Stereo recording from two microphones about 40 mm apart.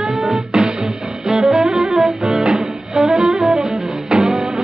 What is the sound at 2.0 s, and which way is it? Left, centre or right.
Music, centre.